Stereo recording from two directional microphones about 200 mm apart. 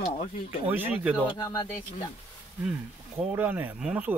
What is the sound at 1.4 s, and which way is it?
Speech, 20° left (ahead or behind).